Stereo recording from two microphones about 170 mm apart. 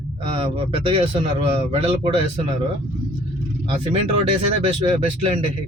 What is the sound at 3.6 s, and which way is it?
Speech, 35° right (ahead or behind).